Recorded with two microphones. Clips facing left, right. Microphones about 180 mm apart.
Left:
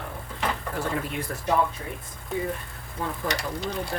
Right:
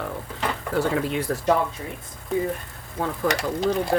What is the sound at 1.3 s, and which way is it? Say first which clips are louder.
Speech: right 8 dB; 90° right.